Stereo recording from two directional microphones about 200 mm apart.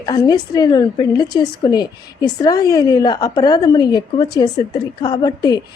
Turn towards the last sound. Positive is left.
turn(degrees=20)  # may be behind; listen again after turning